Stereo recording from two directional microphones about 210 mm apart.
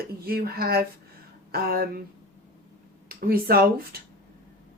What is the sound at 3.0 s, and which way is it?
Speech, 45° right (ahead or behind).